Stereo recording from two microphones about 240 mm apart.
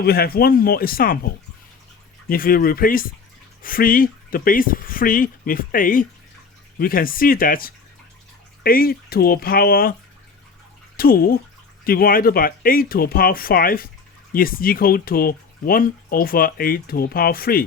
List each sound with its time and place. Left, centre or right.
0.0 s speech: left
2.3 s speech: left
10.9 s speech: left